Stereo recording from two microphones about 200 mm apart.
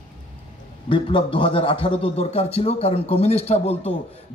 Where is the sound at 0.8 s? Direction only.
25° left (ahead or behind).